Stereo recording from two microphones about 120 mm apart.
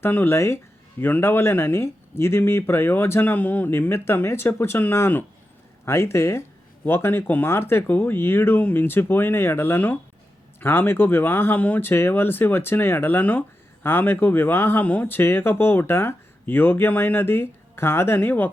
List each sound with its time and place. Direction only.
0.0 s speech: 15° left (ahead or behind)